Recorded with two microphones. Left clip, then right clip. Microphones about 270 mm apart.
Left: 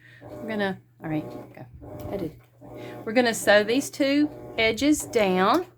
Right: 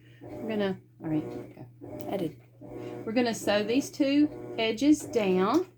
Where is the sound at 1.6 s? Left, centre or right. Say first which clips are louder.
Left 4 dB; centre.